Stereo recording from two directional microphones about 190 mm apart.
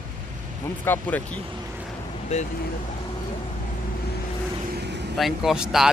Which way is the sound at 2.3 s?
35° left (ahead or behind).